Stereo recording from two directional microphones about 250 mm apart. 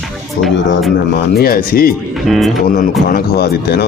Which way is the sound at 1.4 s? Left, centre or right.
Left.